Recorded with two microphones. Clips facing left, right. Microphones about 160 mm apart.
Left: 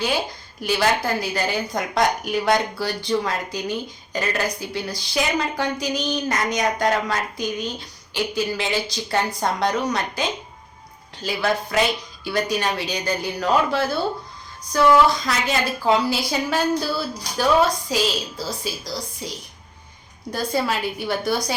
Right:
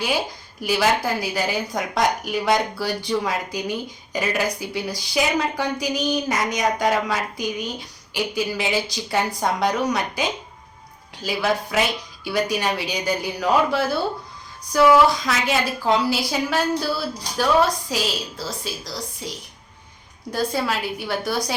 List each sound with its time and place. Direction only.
0.6 s a woman's voice: 5° right (ahead or behind)
20.3 s a woman's voice: centre (ahead or behind)